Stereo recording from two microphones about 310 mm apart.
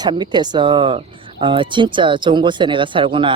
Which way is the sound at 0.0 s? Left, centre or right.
Centre.